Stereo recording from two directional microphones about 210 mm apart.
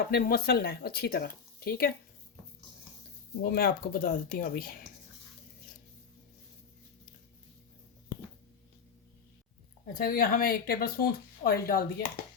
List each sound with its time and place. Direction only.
0.1 s speech: 45° left (ahead or behind)
3.4 s speech: 45° left (ahead or behind)
9.8 s speech: 45° left (ahead or behind)